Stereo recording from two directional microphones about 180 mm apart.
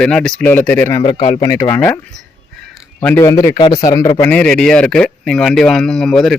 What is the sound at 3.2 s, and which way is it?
Speech, 15° left (ahead or behind).